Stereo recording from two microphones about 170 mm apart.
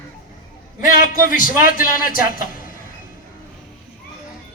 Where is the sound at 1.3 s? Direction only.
55° left (ahead or behind).